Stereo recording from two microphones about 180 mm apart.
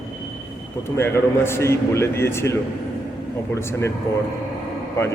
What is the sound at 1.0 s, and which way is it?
Speech, 15° left (ahead or behind).